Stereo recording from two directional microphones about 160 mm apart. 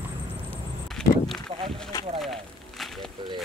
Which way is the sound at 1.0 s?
5° left (ahead or behind).